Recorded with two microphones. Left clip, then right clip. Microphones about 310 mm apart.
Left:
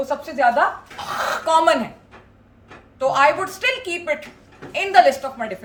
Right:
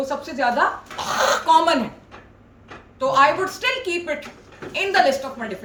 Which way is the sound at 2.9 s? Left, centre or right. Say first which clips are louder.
Even; centre.